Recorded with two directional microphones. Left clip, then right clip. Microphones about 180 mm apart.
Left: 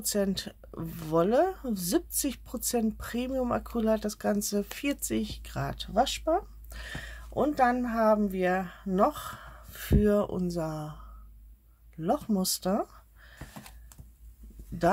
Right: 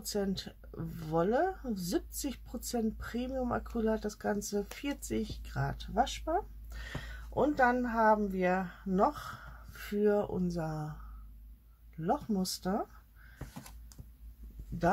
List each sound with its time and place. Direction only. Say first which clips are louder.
0.0 s speech: left 6 dB; 40° left (ahead or behind)
6.7 s speech: left 4 dB; 30° left (ahead or behind)
12.0 s speech: left 4 dB; 40° left (ahead or behind)